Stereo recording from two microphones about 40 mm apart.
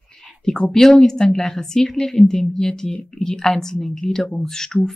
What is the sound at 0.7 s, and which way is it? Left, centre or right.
A woman's voice, centre.